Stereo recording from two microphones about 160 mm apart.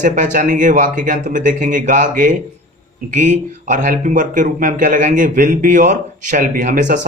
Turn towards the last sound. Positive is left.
turn(degrees=-50)  # may be behind; listen again after turning